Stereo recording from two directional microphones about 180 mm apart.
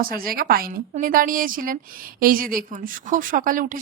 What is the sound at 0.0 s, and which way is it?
A woman's voice, 55° right (ahead or behind).